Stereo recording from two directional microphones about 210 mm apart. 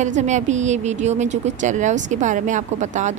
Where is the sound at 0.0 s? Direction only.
35° right (ahead or behind).